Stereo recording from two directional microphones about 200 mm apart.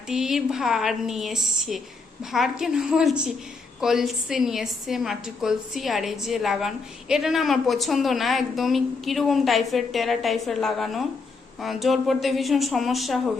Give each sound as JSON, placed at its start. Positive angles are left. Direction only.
{"t": 0.1, "sound": "a woman's voice", "side_deg": 0}